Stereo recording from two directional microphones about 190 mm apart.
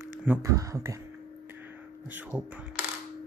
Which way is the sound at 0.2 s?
10° right (ahead or behind).